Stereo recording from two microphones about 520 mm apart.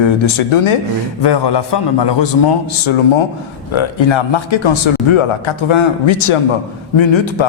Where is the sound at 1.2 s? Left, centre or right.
Left.